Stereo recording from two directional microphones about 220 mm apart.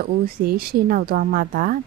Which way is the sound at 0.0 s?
45° right (ahead or behind).